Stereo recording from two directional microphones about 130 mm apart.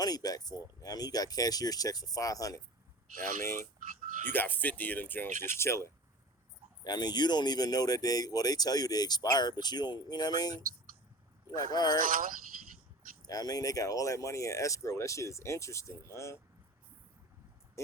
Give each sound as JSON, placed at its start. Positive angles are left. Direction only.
{"t": 0.0, "sound": "speech", "side_deg": 30}
{"t": 4.3, "sound": "speech", "side_deg": 15}
{"t": 6.8, "sound": "speech", "side_deg": 35}
{"t": 11.9, "sound": "speech", "side_deg": -90}
{"t": 13.2, "sound": "speech", "side_deg": 30}